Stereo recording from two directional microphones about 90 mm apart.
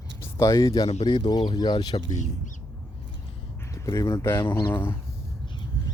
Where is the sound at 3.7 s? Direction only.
40° left (ahead or behind).